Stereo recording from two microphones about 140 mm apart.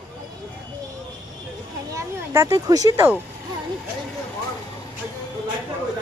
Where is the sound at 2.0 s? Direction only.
20° right (ahead or behind).